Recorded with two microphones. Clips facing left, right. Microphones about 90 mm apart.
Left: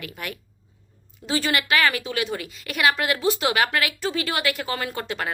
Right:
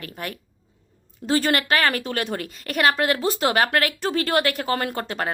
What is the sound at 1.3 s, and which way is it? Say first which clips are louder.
A woman's voice: right 3 dB; 50° right (ahead or behind).